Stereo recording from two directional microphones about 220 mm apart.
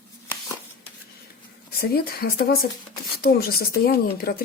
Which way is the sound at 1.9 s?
45° left (ahead or behind).